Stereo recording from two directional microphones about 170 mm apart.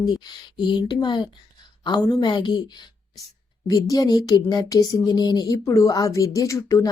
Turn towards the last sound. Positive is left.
turn(degrees=20)  # may be behind; listen again after turning